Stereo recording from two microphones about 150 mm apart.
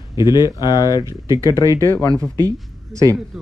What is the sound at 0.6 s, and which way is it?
Speech, 25° left (ahead or behind).